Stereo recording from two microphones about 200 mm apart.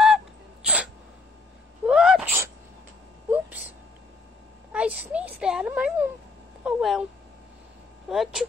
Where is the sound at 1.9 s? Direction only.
5° right (ahead or behind).